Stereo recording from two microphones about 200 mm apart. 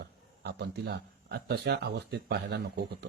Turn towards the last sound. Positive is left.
turn(degrees=-55)  # may be behind; listen again after turning